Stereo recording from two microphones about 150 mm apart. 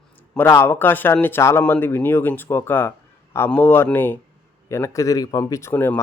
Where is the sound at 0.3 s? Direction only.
15° left (ahead or behind).